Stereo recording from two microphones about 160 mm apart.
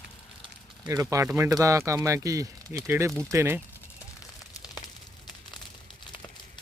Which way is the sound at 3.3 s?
15° right (ahead or behind).